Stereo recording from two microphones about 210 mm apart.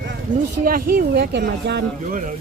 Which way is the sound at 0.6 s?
45° right (ahead or behind).